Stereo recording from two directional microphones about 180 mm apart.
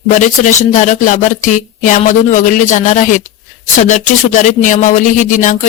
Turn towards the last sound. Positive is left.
turn(degrees=45)  # may be behind; listen again after turning